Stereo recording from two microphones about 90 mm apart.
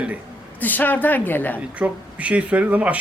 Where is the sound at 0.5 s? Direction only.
20° left (ahead or behind).